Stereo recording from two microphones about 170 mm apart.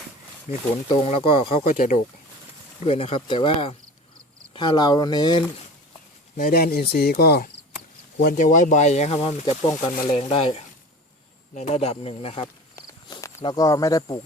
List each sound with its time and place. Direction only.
0.5 s speech: 35° left (ahead or behind)
1.6 s speech: 45° left (ahead or behind)
2.8 s speech: 35° left (ahead or behind)
6.3 s speech: 60° left (ahead or behind)
8.2 s speech: 55° left (ahead or behind); by 12.5 s 35° left (ahead or behind)
12.7 s cricket: 20° left (ahead or behind)